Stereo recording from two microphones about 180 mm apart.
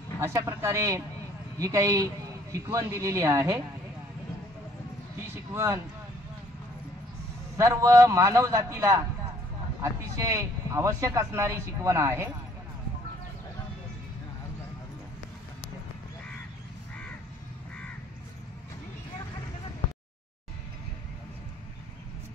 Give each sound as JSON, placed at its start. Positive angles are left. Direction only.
{"t": 0.2, "sound": "speech", "side_deg": -15}
{"t": 5.3, "sound": "speech", "side_deg": -15}
{"t": 7.5, "sound": "speech", "side_deg": -15}